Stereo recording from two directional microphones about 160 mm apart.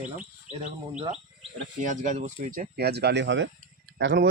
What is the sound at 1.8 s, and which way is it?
Speech, 50° right (ahead or behind).